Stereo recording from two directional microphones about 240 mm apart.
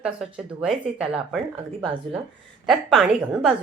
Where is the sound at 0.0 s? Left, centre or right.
Centre.